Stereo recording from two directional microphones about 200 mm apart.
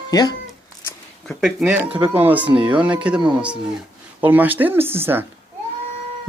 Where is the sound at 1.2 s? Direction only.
5° right (ahead or behind).